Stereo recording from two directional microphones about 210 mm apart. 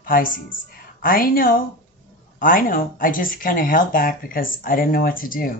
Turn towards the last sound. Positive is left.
turn(degrees=40)  # may be behind; listen again after turning